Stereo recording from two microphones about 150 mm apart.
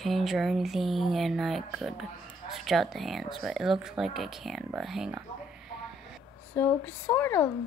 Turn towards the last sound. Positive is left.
turn(degrees=15)  # may be behind; listen again after turning